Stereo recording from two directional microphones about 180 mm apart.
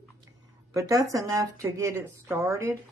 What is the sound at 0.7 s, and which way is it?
Speech, 20° right (ahead or behind).